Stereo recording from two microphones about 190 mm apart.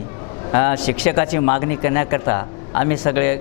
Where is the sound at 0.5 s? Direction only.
25° left (ahead or behind).